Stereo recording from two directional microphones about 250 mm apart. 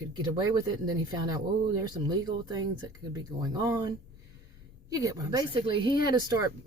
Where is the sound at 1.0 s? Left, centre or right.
Centre.